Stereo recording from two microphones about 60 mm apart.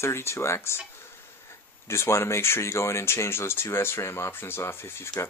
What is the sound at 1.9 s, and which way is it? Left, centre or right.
Speech, left.